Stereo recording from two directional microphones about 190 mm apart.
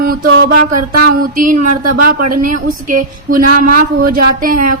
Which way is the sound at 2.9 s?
45° right (ahead or behind).